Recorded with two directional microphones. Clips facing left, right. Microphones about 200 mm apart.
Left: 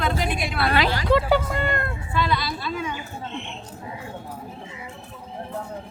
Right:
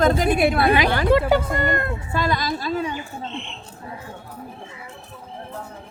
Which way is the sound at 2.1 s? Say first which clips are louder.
Right 1 dB; 45° right (ahead or behind).